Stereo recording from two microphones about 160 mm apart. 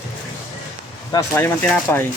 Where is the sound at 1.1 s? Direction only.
15° left (ahead or behind).